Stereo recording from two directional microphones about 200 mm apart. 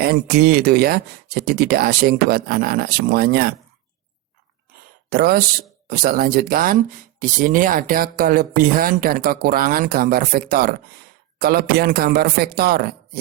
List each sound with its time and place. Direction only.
0.0 s speech: 50° right (ahead or behind)
5.0 s speech: 50° right (ahead or behind)